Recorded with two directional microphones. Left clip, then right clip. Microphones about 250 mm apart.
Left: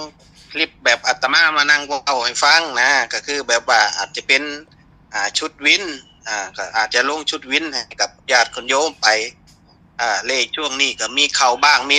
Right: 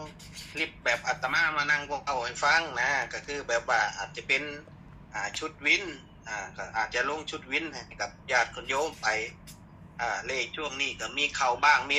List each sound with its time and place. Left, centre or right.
0.5 s a man's voice: left